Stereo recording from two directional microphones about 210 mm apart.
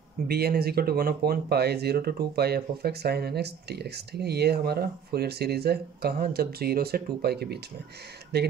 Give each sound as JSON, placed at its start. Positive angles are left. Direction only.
{"t": 0.3, "sound": "speech", "side_deg": -50}